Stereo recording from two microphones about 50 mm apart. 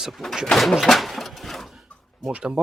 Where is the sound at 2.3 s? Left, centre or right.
Right.